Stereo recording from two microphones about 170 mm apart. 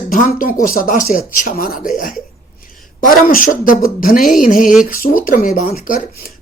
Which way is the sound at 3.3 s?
55° left (ahead or behind).